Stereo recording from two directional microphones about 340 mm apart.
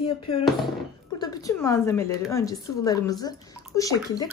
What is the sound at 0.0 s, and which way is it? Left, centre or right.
A woman's voice, centre.